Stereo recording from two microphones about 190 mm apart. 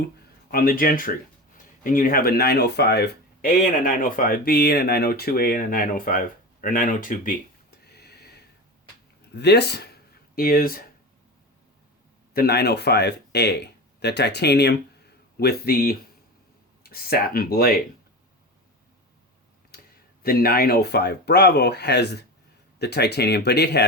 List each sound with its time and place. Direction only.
0.5 s speech: 50° left (ahead or behind)
12.3 s speech: 55° left (ahead or behind)
19.7 s a sound: 55° left (ahead or behind)
20.2 s speech: 50° left (ahead or behind)